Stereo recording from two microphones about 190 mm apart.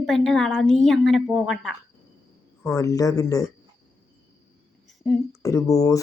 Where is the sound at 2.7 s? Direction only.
15° left (ahead or behind).